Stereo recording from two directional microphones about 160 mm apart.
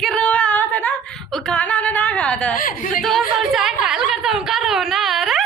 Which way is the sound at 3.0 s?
Centre (ahead or behind).